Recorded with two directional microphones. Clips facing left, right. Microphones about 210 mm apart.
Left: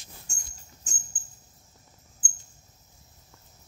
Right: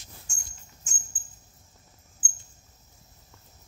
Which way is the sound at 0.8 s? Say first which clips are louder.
Left 3 dB; 35° left (ahead or behind).